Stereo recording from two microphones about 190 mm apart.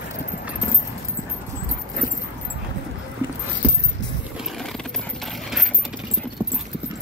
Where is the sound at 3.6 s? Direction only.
10° right (ahead or behind).